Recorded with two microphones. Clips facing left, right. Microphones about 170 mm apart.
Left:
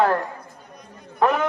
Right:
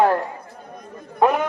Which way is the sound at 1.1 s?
15° right (ahead or behind).